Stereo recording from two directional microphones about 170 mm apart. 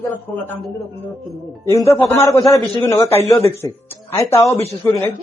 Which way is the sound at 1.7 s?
20° left (ahead or behind).